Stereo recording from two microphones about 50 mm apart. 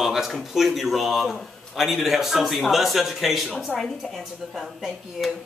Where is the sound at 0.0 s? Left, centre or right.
Centre.